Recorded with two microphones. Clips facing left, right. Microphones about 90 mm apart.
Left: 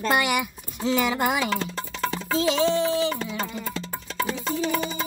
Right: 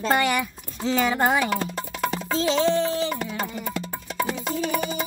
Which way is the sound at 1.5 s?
15° right (ahead or behind).